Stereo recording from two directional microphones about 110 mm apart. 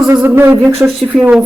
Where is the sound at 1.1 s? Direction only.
10° right (ahead or behind).